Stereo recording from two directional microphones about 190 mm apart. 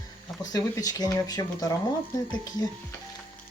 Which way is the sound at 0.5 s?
20° left (ahead or behind).